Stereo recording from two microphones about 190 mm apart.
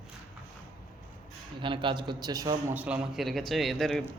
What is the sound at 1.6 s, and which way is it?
A man's voice, 25° right (ahead or behind).